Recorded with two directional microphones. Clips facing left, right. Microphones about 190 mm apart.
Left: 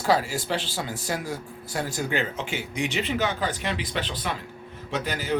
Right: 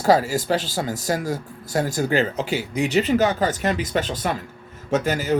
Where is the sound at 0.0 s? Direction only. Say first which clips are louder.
Right 6 dB; 40° right (ahead or behind).